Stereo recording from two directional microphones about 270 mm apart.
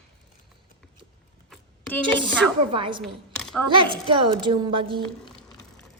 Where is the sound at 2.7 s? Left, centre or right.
Centre.